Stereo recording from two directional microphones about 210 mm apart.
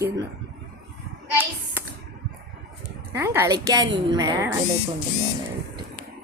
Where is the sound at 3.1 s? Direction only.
15° right (ahead or behind).